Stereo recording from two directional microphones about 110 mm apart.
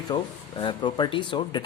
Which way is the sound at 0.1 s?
40° left (ahead or behind).